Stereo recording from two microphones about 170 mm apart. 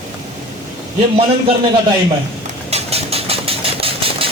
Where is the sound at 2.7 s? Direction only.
35° right (ahead or behind).